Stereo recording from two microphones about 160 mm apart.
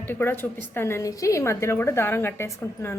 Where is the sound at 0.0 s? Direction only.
15° left (ahead or behind).